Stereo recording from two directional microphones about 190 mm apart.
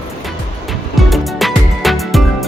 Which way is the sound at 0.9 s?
Centre (ahead or behind).